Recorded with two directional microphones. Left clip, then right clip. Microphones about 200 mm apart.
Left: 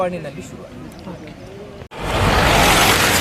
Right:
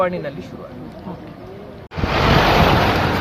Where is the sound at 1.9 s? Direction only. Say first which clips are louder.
Right 1 dB; 15° right (ahead or behind).